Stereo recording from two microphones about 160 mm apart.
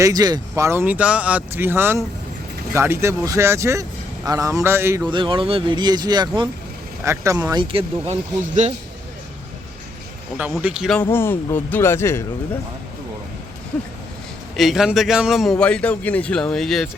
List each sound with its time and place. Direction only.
0.0 s speech: 25° right (ahead or behind)
5.1 s speech: 30° right (ahead or behind)
7.0 s speech: 15° right (ahead or behind); by 8.1 s 35° right (ahead or behind)
10.3 s speech: 10° right (ahead or behind)
11.1 s speech: 15° left (ahead or behind)
14.5 s a man's voice: centre (ahead or behind)